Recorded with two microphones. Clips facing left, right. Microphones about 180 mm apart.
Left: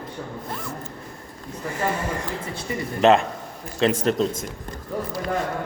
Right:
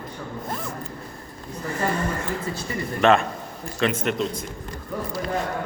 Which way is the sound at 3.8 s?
35° left (ahead or behind).